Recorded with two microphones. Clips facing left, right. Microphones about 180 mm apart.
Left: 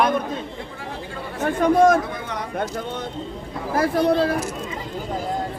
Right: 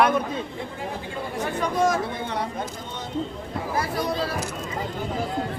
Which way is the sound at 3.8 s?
50° left (ahead or behind).